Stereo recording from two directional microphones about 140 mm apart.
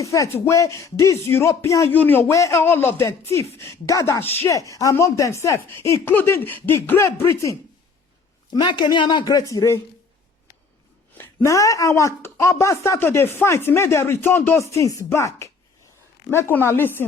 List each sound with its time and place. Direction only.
0.0 s speech: 25° left (ahead or behind)
8.4 s speech: 30° left (ahead or behind)
11.2 s speech: 20° left (ahead or behind)